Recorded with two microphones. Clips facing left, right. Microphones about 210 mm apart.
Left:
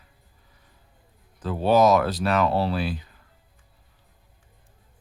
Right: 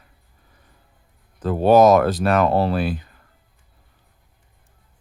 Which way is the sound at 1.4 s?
50° right (ahead or behind).